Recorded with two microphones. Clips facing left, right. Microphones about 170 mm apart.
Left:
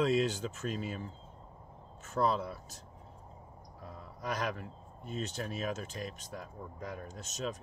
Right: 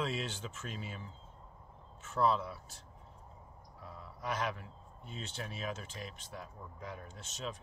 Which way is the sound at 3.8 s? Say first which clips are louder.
Left 1 dB; 45° left (ahead or behind).